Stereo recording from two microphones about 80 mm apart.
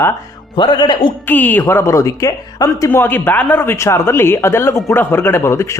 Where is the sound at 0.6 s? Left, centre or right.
Left.